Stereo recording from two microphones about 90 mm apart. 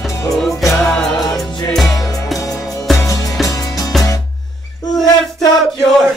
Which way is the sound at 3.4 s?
40° left (ahead or behind).